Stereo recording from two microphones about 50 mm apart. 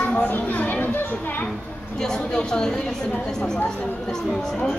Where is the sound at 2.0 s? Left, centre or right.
Centre.